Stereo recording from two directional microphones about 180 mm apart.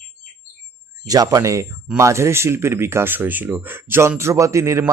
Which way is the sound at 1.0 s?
20° right (ahead or behind).